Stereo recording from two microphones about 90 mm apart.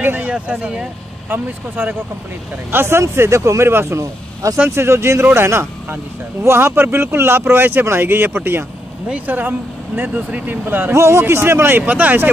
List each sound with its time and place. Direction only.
0.0 s speech: 20° right (ahead or behind)
1.3 s speech: 20° right (ahead or behind)